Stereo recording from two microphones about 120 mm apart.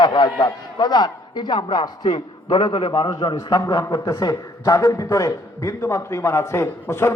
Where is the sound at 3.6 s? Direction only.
30° left (ahead or behind).